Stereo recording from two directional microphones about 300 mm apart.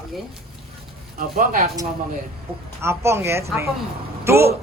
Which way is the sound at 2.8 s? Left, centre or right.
Centre.